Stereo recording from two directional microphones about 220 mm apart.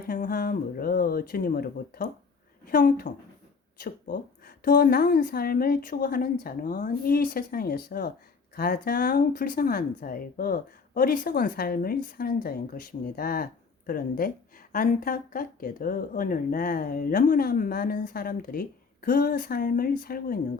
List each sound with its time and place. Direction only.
0.0 s speech: 40° left (ahead or behind)